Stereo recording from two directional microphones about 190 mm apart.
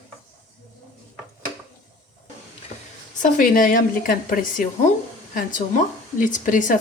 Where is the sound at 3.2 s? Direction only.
45° left (ahead or behind).